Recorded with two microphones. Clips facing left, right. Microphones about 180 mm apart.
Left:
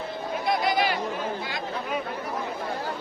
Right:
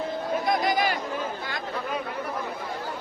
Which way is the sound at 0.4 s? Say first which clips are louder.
Left 1 dB; 45° right (ahead or behind).